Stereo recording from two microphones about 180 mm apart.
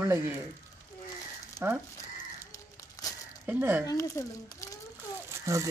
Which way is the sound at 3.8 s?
15° left (ahead or behind).